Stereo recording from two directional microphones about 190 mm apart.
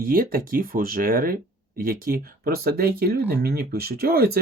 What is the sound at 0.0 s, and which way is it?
Speech, 50° right (ahead or behind).